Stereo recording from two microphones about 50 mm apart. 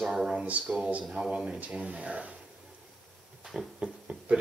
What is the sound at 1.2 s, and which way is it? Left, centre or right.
Speech, right.